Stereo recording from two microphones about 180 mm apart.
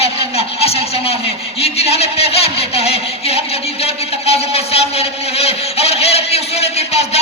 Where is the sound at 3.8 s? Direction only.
35° left (ahead or behind).